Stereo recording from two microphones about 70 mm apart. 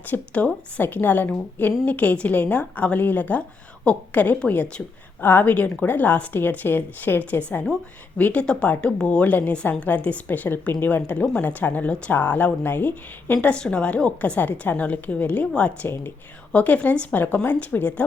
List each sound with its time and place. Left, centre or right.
0.1 s a woman's voice: centre
13.5 s a woman's voice: centre